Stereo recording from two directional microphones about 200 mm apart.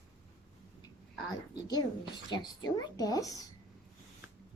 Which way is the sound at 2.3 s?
20° left (ahead or behind).